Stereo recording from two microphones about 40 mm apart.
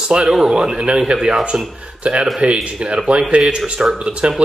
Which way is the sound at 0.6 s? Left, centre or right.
Right.